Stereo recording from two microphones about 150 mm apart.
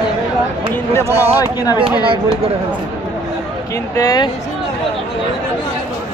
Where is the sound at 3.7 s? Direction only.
25° left (ahead or behind).